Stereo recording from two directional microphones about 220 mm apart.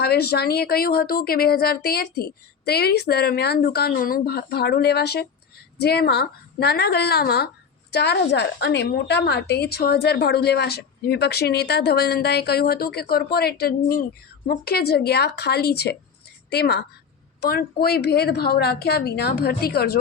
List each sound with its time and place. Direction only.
0.0 s a woman's voice: 45° left (ahead or behind)